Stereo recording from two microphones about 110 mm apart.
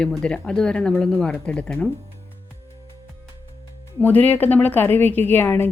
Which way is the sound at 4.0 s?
15° left (ahead or behind).